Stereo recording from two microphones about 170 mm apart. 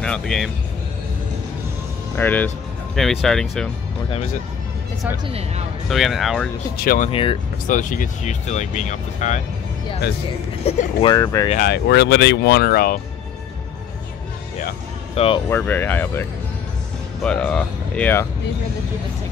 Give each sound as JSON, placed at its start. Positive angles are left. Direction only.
{"t": 0.0, "sound": "speech", "side_deg": 5}
{"t": 2.1, "sound": "speech", "side_deg": 10}
{"t": 5.9, "sound": "speech", "side_deg": 0}
{"t": 6.8, "sound": "speech", "side_deg": 60}
{"t": 7.1, "sound": "speech", "side_deg": 30}
{"t": 7.6, "sound": "speech", "side_deg": 50}
{"t": 10.6, "sound": "speech", "side_deg": 35}
{"t": 11.5, "sound": "speech", "side_deg": 75}
{"t": 15.1, "sound": "speech", "side_deg": 30}
{"t": 15.5, "sound": "speech", "side_deg": 10}